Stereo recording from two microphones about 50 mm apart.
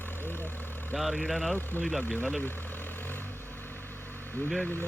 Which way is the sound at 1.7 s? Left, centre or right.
Left.